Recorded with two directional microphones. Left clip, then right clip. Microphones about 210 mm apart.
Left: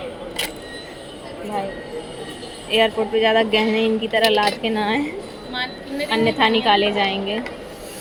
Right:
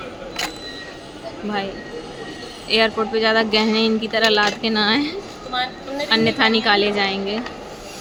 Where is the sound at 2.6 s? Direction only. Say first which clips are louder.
Even; 10° right (ahead or behind).